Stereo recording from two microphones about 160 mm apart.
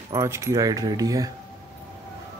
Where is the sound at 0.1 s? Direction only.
20° right (ahead or behind).